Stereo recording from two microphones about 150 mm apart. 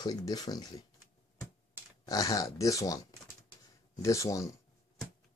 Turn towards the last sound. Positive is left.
turn(degrees=20)  # may be behind; listen again after turning